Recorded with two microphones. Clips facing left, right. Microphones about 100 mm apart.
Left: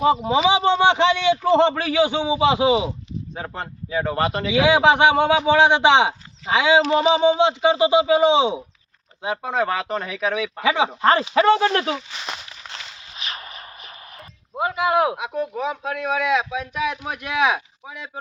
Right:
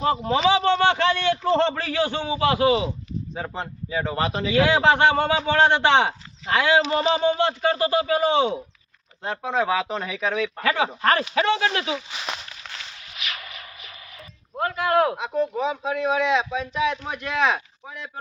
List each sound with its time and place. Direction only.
0.0 s speech: 15° left (ahead or behind)
3.3 s speech: centre (ahead or behind)
4.5 s speech: 15° left (ahead or behind)
9.2 s speech: 5° left (ahead or behind)
10.6 s speech: 15° left (ahead or behind)
11.3 s speech: 40° left (ahead or behind)
12.1 s a sound: centre (ahead or behind)
12.7 s a sound: 30° left (ahead or behind)
14.5 s speech: 10° left (ahead or behind)